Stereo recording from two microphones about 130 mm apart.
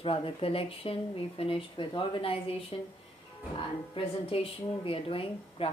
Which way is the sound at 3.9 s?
45° left (ahead or behind).